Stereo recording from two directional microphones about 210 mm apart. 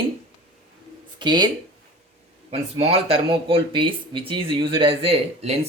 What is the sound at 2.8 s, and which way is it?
Speech, 30° right (ahead or behind).